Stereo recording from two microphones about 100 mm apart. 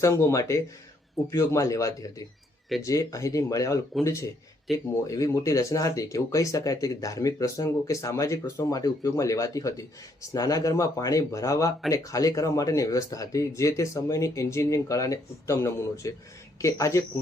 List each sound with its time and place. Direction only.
0.0 s speech: 30° left (ahead or behind)
4.7 s speech: centre (ahead or behind)
5.0 s speech: 35° left (ahead or behind)